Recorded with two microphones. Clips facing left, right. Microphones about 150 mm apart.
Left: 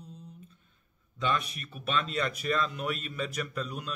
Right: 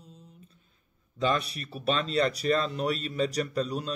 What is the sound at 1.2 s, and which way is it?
Speech, 35° right (ahead or behind).